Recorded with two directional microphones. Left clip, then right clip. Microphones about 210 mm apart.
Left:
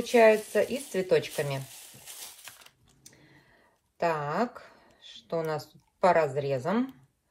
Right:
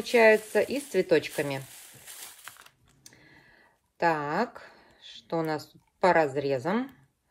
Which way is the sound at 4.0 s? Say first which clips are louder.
Right 2 dB; 40° right (ahead or behind).